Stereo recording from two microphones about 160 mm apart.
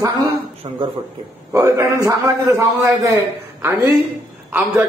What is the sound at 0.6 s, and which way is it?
Speech, 35° right (ahead or behind).